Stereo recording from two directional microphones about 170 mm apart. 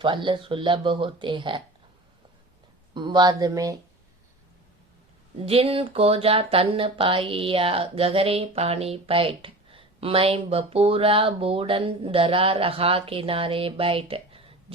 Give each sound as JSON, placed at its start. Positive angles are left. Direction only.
{"t": 0.0, "sound": "speech", "side_deg": -30}
{"t": 2.9, "sound": "speech", "side_deg": -25}
{"t": 5.5, "sound": "speech", "side_deg": -35}